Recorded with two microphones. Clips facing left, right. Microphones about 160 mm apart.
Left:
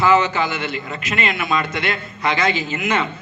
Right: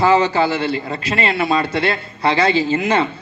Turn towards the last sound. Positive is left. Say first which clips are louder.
# right 5 dB
turn(degrees=-35)  # may be behind; listen again after turning